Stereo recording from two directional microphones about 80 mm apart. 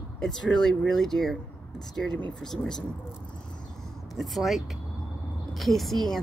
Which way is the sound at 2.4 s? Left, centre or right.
Centre.